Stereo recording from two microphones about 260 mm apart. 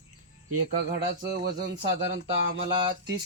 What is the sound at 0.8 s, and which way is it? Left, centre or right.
Speech, right.